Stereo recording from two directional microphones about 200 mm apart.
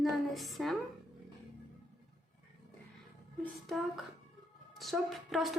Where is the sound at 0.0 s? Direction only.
Centre (ahead or behind).